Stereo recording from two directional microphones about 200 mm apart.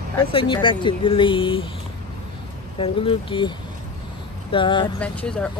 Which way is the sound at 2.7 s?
25° left (ahead or behind).